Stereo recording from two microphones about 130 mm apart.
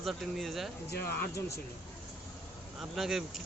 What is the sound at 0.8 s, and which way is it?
Speech, 20° left (ahead or behind).